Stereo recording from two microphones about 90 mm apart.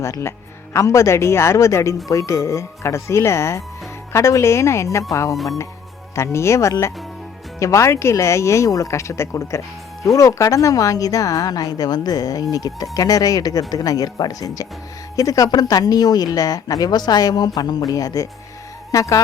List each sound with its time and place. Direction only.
0.0 s a woman's voice: 30° left (ahead or behind)